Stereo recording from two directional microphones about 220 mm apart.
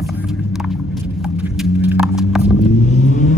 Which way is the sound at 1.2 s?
5° right (ahead or behind).